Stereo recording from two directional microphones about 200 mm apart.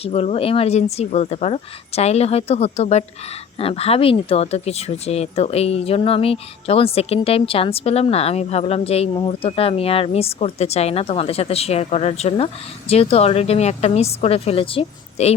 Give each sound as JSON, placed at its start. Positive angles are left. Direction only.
{"t": 0.0, "sound": "speech", "side_deg": 30}